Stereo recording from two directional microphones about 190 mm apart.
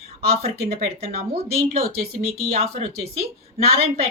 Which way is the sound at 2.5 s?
35° right (ahead or behind).